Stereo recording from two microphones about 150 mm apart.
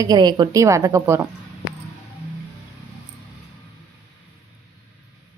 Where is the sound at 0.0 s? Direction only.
25° right (ahead or behind).